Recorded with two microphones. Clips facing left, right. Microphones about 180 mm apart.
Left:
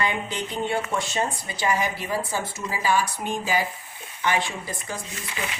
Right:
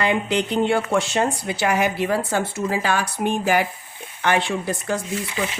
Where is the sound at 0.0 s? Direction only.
85° right; by 4.9 s 65° right (ahead or behind).